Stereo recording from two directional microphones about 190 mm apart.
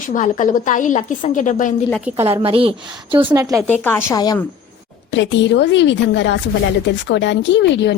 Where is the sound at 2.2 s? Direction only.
30° right (ahead or behind).